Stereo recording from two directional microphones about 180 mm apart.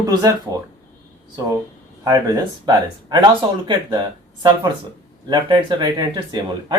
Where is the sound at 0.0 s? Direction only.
20° right (ahead or behind).